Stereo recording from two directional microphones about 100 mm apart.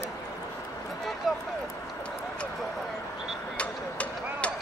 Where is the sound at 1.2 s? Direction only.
Centre (ahead or behind).